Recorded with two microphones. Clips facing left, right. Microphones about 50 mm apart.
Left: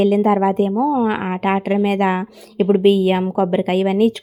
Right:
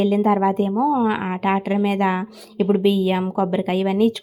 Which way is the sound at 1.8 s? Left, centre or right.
Left.